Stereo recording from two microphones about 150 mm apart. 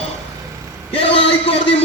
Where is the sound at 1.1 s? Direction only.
40° left (ahead or behind).